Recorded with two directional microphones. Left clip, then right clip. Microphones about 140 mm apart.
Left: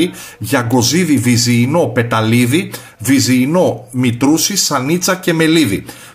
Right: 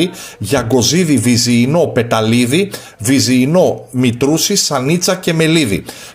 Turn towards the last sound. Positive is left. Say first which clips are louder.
# left 1 dB
turn(degrees=-35)  # may be behind; listen again after turning